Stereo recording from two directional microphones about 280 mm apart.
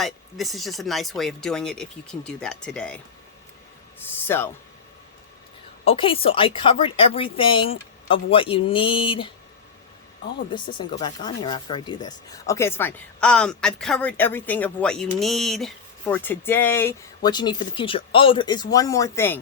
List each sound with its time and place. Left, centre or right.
0.0 s speech: centre
4.3 s speech: centre
5.8 s a woman's voice: centre
10.5 s speech: centre